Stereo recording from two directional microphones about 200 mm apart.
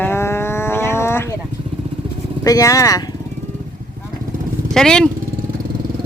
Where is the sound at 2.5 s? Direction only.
15° left (ahead or behind).